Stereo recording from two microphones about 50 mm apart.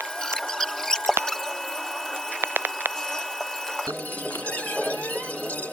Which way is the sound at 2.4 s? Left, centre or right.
Right.